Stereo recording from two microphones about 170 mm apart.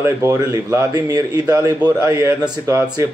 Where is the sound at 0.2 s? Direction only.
20° right (ahead or behind).